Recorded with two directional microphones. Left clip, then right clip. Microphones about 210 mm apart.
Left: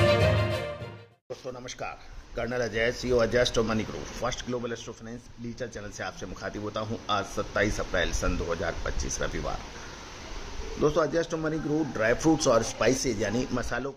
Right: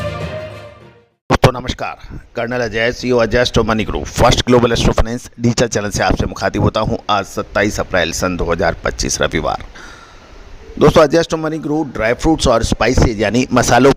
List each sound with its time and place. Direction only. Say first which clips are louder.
1.6 s speech: right 14 dB; 50° right (ahead or behind)
10.8 s speech: right 15 dB; 50° right (ahead or behind)